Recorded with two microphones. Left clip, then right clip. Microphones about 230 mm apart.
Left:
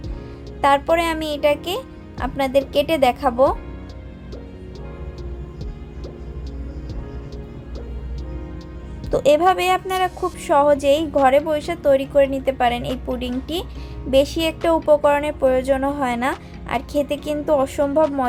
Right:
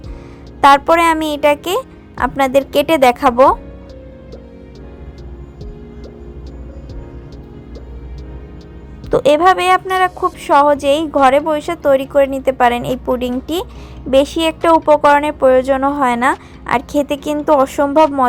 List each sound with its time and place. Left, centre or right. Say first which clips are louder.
0.6 s speech: right 8 dB; right
9.0 s a woman's voice: right 5 dB; centre